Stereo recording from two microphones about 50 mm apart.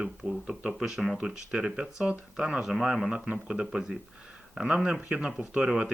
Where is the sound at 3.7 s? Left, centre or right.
Centre.